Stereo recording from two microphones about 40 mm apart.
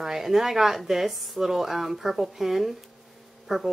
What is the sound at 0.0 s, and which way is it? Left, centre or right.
Speech, centre.